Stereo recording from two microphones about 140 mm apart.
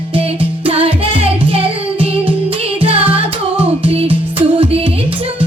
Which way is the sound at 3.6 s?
40° right (ahead or behind).